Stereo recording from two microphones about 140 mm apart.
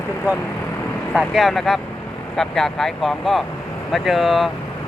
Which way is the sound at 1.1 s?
Centre (ahead or behind).